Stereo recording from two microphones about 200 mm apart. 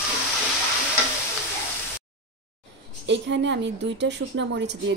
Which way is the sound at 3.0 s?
60° right (ahead or behind).